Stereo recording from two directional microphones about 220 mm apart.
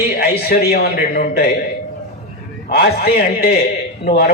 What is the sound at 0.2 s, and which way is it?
A man's voice, 45° left (ahead or behind).